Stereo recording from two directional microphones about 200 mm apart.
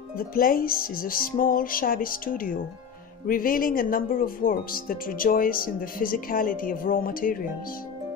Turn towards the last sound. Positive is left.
turn(degrees=45)  # may be behind; listen again after turning